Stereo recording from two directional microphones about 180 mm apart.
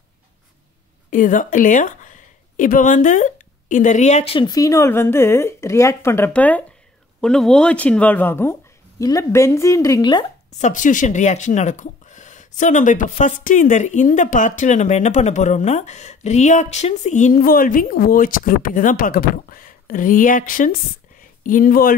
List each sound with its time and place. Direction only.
1.1 s a woman's voice: 45° left (ahead or behind); by 10.2 s 20° left (ahead or behind)
10.6 s speech: 45° left (ahead or behind)